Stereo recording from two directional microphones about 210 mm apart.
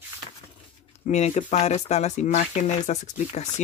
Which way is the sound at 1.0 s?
35° left (ahead or behind).